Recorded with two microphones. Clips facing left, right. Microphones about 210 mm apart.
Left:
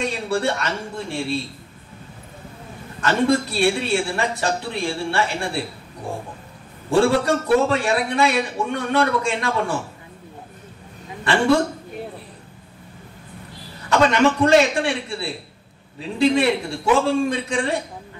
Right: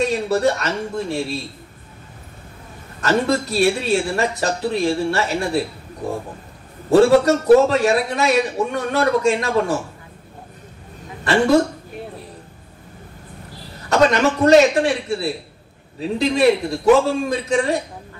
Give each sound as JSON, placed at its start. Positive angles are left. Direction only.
{"t": 0.0, "sound": "a man's voice", "side_deg": -40}
{"t": 3.0, "sound": "a man's voice", "side_deg": -40}
{"t": 6.9, "sound": "a man's voice", "side_deg": -40}
{"t": 13.8, "sound": "a man's voice", "side_deg": -40}
{"t": 16.2, "sound": "a man's voice", "side_deg": -40}